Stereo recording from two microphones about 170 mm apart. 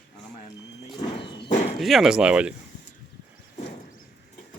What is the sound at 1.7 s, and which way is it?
Speech, centre (ahead or behind).